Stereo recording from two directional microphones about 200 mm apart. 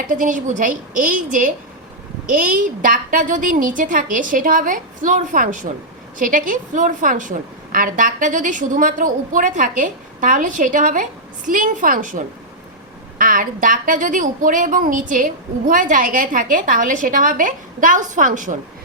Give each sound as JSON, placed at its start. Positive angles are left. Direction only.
{"t": 0.1, "sound": "a woman's voice", "side_deg": -40}